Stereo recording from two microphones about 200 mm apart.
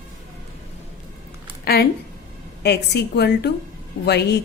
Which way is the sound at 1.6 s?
50° left (ahead or behind).